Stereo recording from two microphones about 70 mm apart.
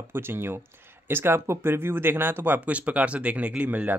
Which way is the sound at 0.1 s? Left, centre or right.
Right.